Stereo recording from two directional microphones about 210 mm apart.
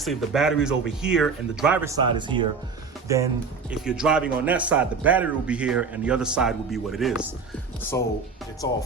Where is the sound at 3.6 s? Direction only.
5° right (ahead or behind).